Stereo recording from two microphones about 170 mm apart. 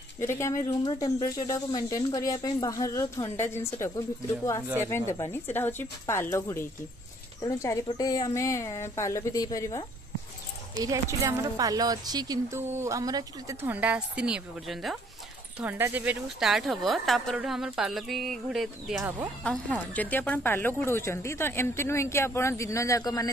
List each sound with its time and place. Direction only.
0.2 s a woman's voice: 15° left (ahead or behind)
4.8 s a woman's voice: 20° left (ahead or behind)
10.8 s a woman's voice: 20° right (ahead or behind)
19.4 s speech: 5° left (ahead or behind)